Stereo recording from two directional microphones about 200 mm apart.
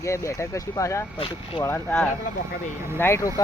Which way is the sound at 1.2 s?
25° left (ahead or behind).